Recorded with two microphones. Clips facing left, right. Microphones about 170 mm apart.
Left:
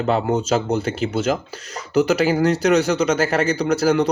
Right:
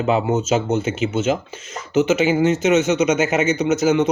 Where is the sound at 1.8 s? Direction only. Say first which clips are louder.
Even; 5° right (ahead or behind).